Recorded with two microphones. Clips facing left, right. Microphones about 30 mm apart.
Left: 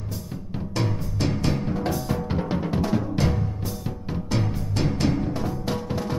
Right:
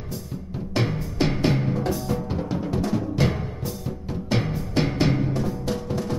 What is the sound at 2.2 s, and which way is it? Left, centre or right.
Music, left.